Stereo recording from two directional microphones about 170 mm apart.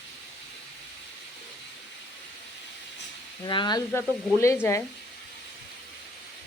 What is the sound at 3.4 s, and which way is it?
Speech, 25° left (ahead or behind).